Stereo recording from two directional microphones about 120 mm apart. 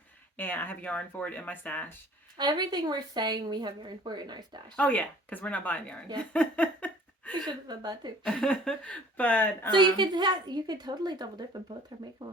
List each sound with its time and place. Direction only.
0.3 s speech: 15° left (ahead or behind)
2.4 s speech: 35° right (ahead or behind)
4.8 s speech: 10° left (ahead or behind)
6.3 s a sound: 10° left (ahead or behind)
7.4 s speech: 35° right (ahead or behind)
8.2 s speech: 5° left (ahead or behind)
9.7 s speech: 40° right (ahead or behind)